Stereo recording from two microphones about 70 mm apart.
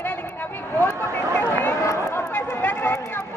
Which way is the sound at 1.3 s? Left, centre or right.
Left.